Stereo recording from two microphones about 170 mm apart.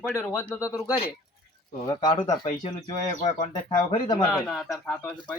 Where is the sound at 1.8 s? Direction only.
25° left (ahead or behind).